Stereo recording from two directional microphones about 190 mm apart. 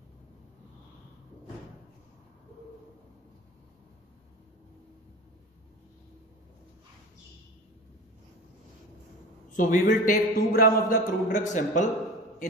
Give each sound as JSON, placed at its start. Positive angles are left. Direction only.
{"t": 9.5, "sound": "a man's voice", "side_deg": 40}